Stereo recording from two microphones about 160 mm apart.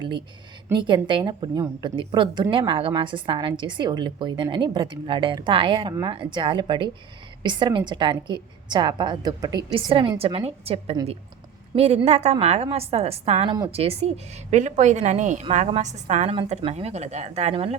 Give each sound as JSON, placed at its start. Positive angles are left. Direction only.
{"t": 0.7, "sound": "a woman's voice", "side_deg": -30}